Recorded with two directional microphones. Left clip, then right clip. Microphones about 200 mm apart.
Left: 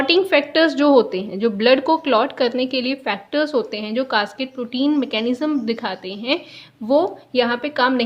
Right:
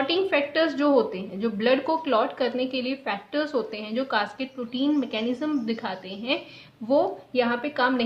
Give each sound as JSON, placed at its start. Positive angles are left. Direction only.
{"t": 0.0, "sound": "a woman's voice", "side_deg": 45}